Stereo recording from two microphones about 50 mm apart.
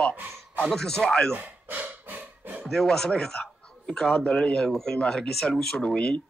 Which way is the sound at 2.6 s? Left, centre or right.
Centre.